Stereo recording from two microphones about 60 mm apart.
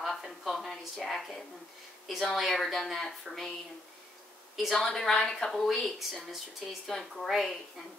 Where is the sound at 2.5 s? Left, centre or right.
Centre.